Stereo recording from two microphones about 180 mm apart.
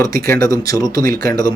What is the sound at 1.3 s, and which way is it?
Speech, 20° left (ahead or behind).